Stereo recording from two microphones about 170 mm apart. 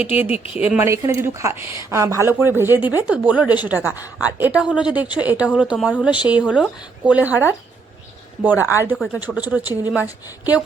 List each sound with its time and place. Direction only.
0.2 s a woman's voice: 10° right (ahead or behind)
0.9 s a woman's voice: 15° right (ahead or behind)